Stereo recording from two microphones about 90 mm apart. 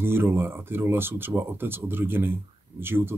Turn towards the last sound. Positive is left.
turn(degrees=-25)  # may be behind; listen again after turning